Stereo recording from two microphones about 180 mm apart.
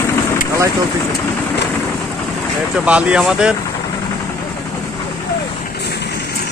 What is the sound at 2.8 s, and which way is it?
Speech, 5° right (ahead or behind).